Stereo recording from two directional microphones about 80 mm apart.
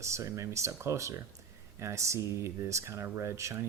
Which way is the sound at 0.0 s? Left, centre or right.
Right.